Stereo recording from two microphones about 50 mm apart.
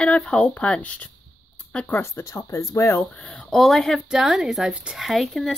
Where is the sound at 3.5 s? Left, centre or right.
Centre.